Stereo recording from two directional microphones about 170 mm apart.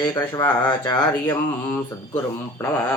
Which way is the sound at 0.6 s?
25° left (ahead or behind).